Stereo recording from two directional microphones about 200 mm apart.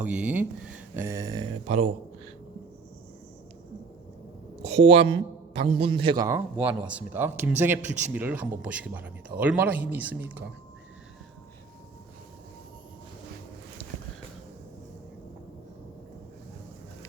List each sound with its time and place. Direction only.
0.0 s mantra: 5° right (ahead or behind)
1.6 s a man's voice: 30° right (ahead or behind)
4.6 s a man's voice: 30° right (ahead or behind); by 10.4 s 10° right (ahead or behind)